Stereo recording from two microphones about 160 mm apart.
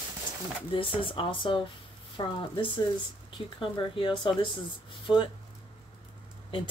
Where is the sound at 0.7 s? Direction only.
35° left (ahead or behind).